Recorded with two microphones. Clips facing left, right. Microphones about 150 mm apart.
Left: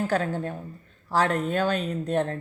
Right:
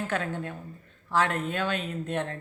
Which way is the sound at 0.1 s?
35° left (ahead or behind).